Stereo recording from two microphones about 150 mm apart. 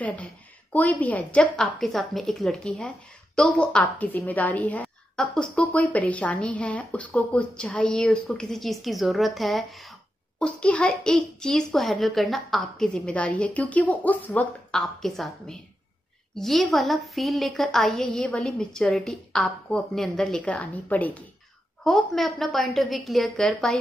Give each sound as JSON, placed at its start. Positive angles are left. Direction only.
{"t": 0.0, "sound": "a woman's voice", "side_deg": 10}